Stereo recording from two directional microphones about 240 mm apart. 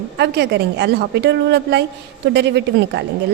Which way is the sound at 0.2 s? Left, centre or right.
Right.